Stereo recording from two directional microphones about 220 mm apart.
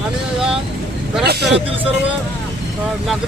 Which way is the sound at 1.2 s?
45° right (ahead or behind).